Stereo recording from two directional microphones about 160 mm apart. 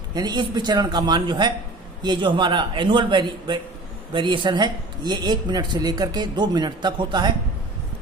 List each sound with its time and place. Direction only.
0.1 s speech: 25° right (ahead or behind)